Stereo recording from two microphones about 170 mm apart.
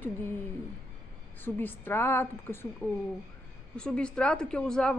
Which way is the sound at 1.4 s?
10° left (ahead or behind).